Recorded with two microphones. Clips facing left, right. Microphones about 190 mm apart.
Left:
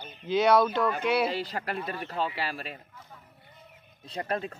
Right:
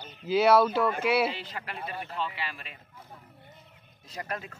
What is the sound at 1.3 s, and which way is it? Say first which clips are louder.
Speech: left 7 dB; 40° left (ahead or behind).